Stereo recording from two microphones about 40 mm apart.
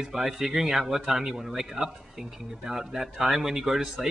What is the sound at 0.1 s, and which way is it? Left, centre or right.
Speech, centre.